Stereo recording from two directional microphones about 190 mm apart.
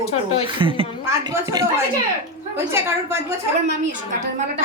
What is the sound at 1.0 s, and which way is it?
A woman's voice, 15° right (ahead or behind).